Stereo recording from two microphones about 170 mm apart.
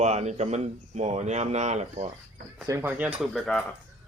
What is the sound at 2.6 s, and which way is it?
Speech, 15° right (ahead or behind).